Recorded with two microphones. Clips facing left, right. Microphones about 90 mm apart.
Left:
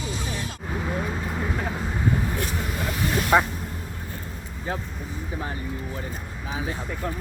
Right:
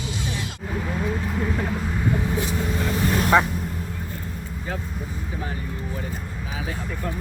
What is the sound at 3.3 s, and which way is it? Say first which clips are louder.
Speech: right 1 dB; 10° left (ahead or behind).